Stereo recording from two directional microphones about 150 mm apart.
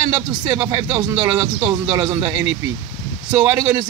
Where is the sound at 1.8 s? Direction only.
35° right (ahead or behind).